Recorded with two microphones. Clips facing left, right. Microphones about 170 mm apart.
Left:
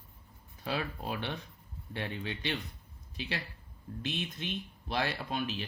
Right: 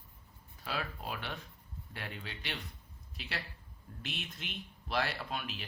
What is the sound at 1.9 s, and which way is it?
Speech, 25° left (ahead or behind).